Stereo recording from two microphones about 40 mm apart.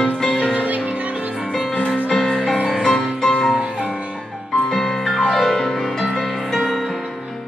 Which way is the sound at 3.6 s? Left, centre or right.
Right.